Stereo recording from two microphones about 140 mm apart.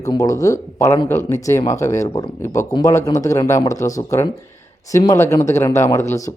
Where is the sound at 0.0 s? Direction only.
25° left (ahead or behind).